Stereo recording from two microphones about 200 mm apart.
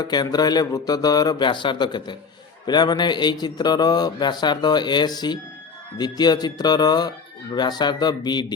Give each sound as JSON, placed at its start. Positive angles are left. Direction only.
{"t": 0.0, "sound": "speech", "side_deg": 20}